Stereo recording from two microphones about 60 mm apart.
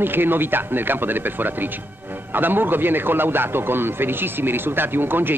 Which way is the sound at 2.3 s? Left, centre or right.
Right.